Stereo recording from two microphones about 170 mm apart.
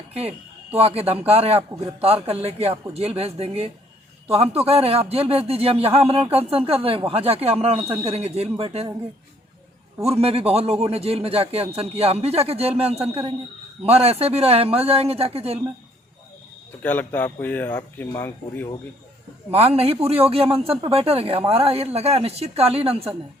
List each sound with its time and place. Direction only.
0.1 s a man's voice: 35° right (ahead or behind)
10.0 s a man's voice: 35° right (ahead or behind)
16.8 s speech: 10° left (ahead or behind)
19.5 s a man's voice: 35° right (ahead or behind)